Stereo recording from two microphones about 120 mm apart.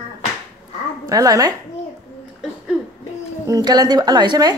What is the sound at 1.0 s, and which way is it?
Speech, 30° right (ahead or behind).